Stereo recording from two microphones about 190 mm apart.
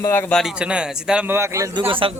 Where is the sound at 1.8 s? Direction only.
25° right (ahead or behind).